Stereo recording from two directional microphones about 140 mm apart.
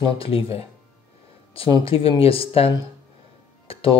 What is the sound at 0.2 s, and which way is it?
Speech, 40° left (ahead or behind).